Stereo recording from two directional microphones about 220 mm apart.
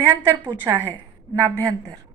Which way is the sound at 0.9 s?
20° right (ahead or behind).